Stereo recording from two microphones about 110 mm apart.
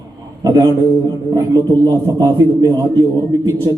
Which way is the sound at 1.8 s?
30° right (ahead or behind).